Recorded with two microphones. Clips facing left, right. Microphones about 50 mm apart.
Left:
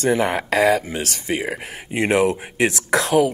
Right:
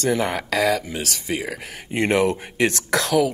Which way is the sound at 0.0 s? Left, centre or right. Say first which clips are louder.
Left 3 dB; left.